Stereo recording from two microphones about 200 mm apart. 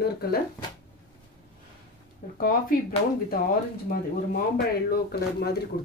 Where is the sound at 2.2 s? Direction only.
45° left (ahead or behind).